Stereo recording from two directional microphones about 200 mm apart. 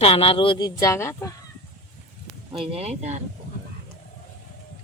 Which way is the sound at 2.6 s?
30° right (ahead or behind).